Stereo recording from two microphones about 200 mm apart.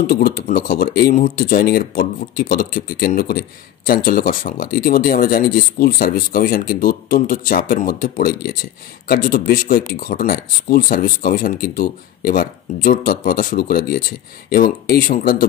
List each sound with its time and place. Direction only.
0.0 s speech: 50° left (ahead or behind)